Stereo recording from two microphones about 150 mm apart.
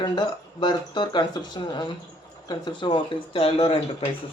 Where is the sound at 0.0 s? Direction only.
30° left (ahead or behind).